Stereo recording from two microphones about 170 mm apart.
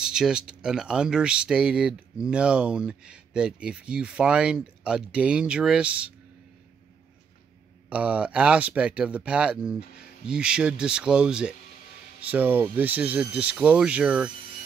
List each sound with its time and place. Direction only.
0.0 s speech: 5° right (ahead or behind)
7.9 s speech: 5° right (ahead or behind)